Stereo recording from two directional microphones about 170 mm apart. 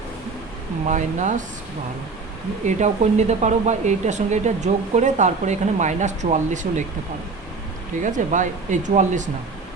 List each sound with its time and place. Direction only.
0.9 s speech: 45° right (ahead or behind)
2.6 s speech: 45° right (ahead or behind)
8.0 s speech: 45° right (ahead or behind)